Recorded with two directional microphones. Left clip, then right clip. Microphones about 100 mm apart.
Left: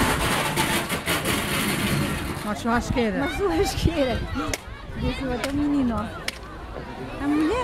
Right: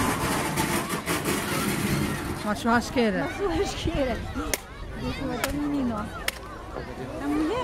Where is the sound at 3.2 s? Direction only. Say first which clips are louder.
Left 4 dB; 30° left (ahead or behind).